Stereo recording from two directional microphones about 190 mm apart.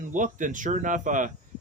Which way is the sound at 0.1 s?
40° right (ahead or behind).